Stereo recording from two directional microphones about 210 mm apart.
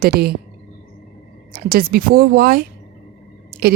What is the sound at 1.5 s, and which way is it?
A woman's voice, 45° right (ahead or behind).